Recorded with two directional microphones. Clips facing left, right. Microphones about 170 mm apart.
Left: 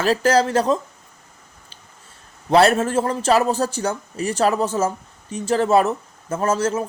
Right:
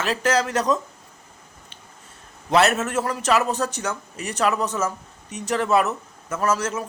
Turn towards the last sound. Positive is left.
turn(degrees=30)  # may be behind; listen again after turning